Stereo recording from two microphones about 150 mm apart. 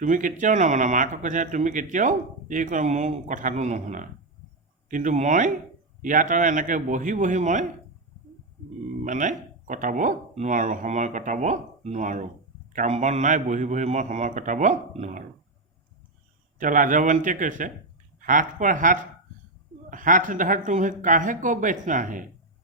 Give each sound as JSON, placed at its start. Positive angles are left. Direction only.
{"t": 0.0, "sound": "speech", "side_deg": -60}
{"t": 9.0, "sound": "speech", "side_deg": -60}
{"t": 16.6, "sound": "speech", "side_deg": -60}